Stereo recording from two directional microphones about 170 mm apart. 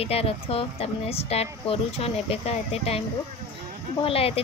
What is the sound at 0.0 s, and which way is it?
Speech, 35° left (ahead or behind).